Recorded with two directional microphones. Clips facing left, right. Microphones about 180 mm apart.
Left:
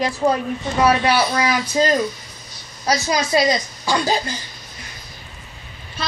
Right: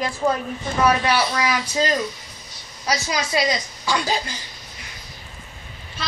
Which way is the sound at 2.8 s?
40° left (ahead or behind).